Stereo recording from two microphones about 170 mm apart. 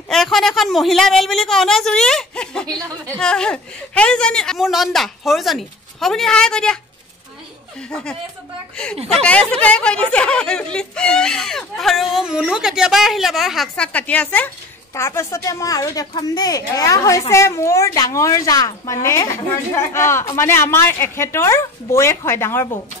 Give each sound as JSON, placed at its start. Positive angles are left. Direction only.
{"t": 0.1, "sound": "speech", "side_deg": 0}
{"t": 7.9, "sound": "speech", "side_deg": 5}
{"t": 9.2, "sound": "a woman's voice", "side_deg": 5}